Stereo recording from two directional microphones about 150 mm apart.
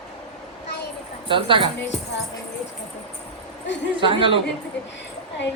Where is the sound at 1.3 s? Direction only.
35° right (ahead or behind).